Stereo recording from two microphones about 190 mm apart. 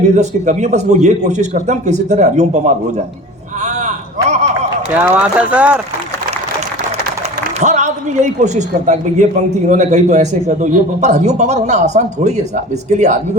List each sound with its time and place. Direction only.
0.0 s a man's voice: 35° right (ahead or behind)
3.6 s a sound: 40° right (ahead or behind)
4.9 s speech: 10° right (ahead or behind)
7.6 s a man's voice: 40° right (ahead or behind)